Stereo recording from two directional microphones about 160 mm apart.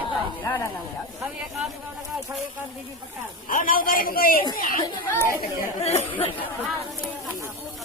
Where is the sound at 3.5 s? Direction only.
60° left (ahead or behind).